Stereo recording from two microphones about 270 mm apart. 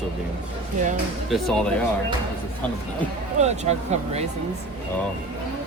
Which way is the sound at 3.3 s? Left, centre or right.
Right.